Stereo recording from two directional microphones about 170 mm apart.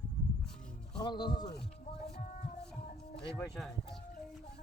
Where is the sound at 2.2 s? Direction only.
50° left (ahead or behind).